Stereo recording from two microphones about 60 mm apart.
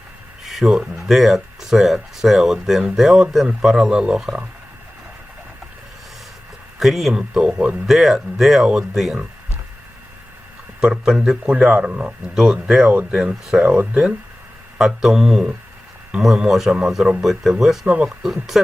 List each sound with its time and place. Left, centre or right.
0.4 s speech: centre
6.7 s speech: centre
7.1 s speech: centre
7.9 s speech: centre
10.8 s speech: centre
12.4 s speech: centre
14.8 s speech: centre